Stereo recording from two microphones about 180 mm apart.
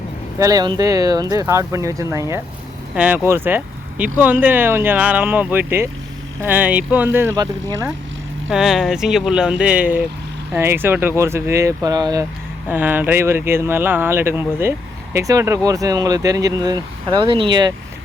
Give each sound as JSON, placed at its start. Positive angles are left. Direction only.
{"t": 0.3, "sound": "speech", "side_deg": -20}
{"t": 8.4, "sound": "speech", "side_deg": -5}
{"t": 12.6, "sound": "speech", "side_deg": -10}